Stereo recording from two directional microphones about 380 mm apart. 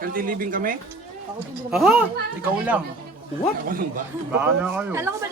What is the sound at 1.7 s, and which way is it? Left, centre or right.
Speech, centre.